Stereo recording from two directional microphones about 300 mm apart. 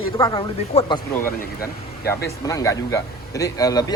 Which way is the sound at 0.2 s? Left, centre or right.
Centre.